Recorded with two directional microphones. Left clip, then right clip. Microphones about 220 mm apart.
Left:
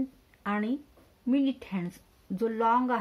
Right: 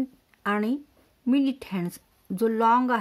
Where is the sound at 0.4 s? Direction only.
50° right (ahead or behind).